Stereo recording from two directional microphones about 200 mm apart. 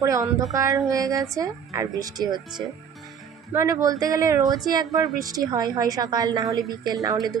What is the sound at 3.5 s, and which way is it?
A woman's voice, 15° right (ahead or behind).